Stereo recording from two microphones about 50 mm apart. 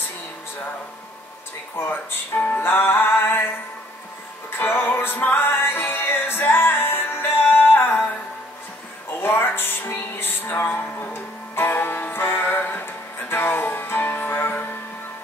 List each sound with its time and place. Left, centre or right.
1.8 s speech: left
4.6 s music: left
9.2 s music: left